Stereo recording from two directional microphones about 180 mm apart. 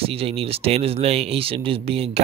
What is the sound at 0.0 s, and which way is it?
Speech, 35° right (ahead or behind).